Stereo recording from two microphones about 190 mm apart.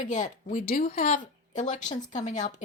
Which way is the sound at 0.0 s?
40° left (ahead or behind).